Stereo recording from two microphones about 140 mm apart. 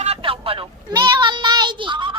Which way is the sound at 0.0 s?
45° right (ahead or behind).